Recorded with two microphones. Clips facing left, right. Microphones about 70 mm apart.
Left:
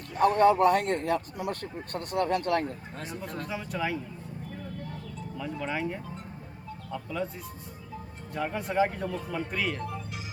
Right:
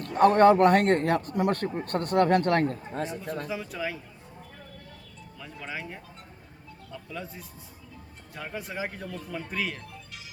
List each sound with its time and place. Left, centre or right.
0.1 s a man's voice: right
3.4 s speech: centre
5.4 s speech: centre
7.1 s speech: centre